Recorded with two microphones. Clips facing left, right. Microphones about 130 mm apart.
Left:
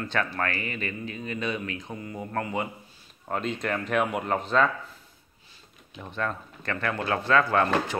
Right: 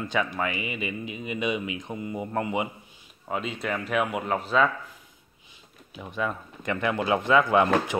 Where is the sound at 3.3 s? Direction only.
5° right (ahead or behind).